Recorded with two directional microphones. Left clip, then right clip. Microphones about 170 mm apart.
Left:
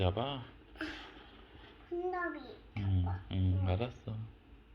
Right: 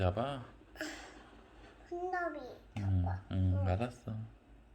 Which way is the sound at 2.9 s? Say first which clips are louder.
Right 1 dB; 30° right (ahead or behind).